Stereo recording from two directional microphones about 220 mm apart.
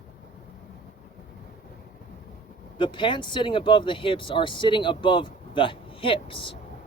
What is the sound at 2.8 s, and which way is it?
Speech, 20° left (ahead or behind).